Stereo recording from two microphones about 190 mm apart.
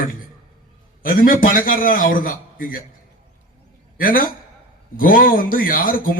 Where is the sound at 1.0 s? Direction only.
50° left (ahead or behind).